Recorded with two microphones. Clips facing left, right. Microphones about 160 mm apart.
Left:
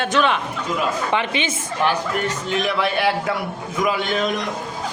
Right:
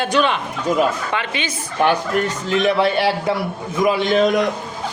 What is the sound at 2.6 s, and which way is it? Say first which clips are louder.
A man's voice: right 4 dB; 30° right (ahead or behind).